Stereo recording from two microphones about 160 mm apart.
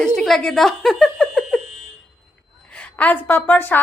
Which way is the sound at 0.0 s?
5° left (ahead or behind).